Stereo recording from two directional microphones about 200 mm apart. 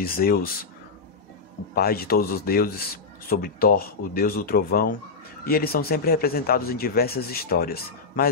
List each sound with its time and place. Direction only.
0.0 s speech: 45° left (ahead or behind)
1.8 s speech: 50° left (ahead or behind)